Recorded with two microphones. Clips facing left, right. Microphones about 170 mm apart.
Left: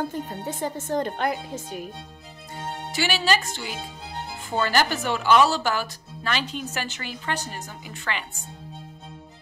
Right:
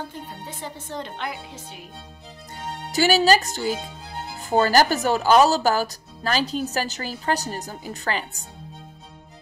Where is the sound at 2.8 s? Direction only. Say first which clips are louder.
Right 7 dB; 40° right (ahead or behind).